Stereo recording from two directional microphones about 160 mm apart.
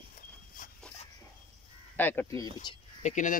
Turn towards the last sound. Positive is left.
turn(degrees=50)  # may be behind; listen again after turning